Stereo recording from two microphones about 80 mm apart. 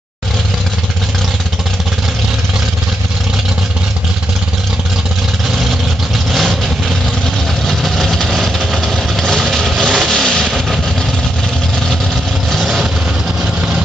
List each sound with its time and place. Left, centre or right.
7.6 s vehicle: centre
12.4 s vehicle: centre